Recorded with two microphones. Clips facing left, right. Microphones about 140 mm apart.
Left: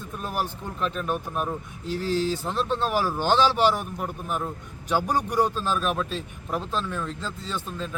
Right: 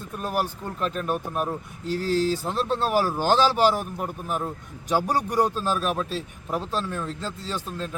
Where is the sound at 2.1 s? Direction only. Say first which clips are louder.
Right 2 dB; 40° right (ahead or behind).